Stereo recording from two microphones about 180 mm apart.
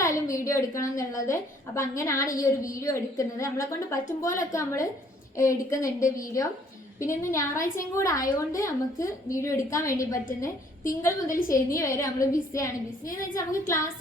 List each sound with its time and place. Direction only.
0.0 s a woman's voice: 15° left (ahead or behind)
11.3 s a woman's voice: 50° left (ahead or behind)
11.7 s a woman's voice: 15° left (ahead or behind)